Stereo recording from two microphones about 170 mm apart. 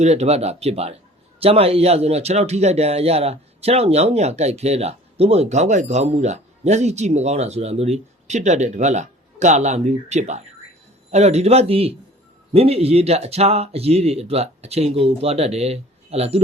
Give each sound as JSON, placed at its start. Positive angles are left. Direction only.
{"t": 0.0, "sound": "speech", "side_deg": -40}